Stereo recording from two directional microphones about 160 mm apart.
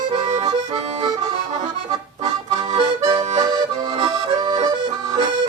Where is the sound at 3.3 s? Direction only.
25° right (ahead or behind).